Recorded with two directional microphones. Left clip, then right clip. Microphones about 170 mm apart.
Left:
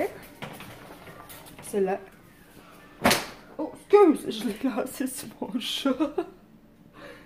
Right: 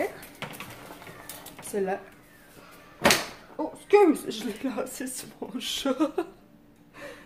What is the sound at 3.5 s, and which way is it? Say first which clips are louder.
Speech: left 1 dB; 15° left (ahead or behind).